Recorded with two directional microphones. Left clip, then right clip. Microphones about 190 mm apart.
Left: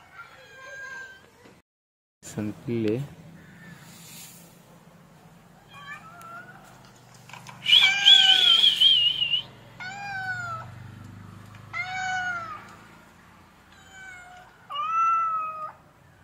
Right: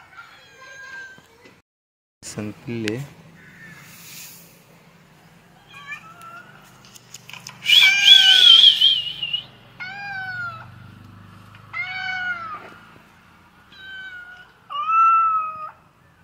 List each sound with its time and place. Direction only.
2.2 s speech: centre (ahead or behind)
7.2 s a sound: 15° left (ahead or behind)
7.6 s whistle: 5° right (ahead or behind)
9.8 s cat: 15° left (ahead or behind)
11.7 s cat: 10° left (ahead or behind)
14.7 s cat: 5° right (ahead or behind)